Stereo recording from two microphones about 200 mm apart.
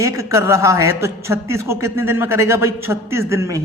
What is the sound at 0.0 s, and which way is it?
A man's voice, 15° right (ahead or behind).